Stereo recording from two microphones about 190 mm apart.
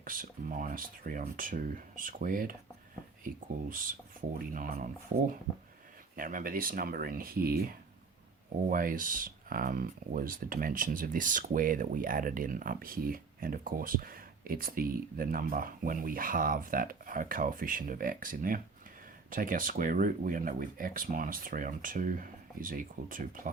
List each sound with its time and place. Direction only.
0.0 s speech: 45° right (ahead or behind)
6.1 s speech: 45° right (ahead or behind)